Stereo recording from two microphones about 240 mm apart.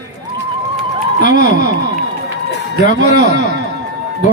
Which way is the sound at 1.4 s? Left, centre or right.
Right.